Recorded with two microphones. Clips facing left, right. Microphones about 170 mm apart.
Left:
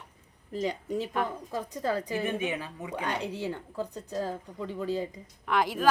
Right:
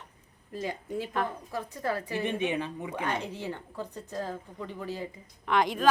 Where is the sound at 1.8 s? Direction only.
20° left (ahead or behind).